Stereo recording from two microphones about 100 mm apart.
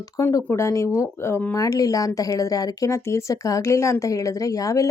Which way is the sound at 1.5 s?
35° left (ahead or behind).